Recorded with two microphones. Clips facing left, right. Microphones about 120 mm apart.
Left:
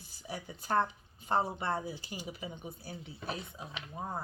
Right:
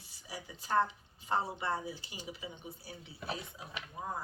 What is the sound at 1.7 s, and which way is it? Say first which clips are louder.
Speech: left 2 dB; 30° left (ahead or behind).